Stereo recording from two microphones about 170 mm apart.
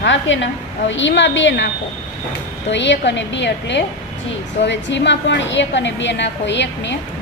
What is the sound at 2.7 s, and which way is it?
A woman's voice, 90° left.